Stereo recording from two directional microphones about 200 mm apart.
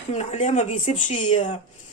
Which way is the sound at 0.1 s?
35° left (ahead or behind).